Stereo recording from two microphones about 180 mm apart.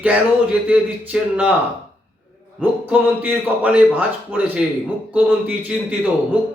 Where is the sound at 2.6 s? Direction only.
10° right (ahead or behind).